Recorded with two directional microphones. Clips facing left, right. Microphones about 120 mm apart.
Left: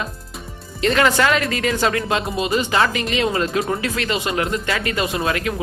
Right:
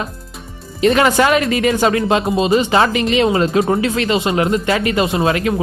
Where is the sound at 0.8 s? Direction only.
20° right (ahead or behind).